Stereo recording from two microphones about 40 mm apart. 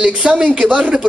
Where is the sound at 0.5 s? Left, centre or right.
Right.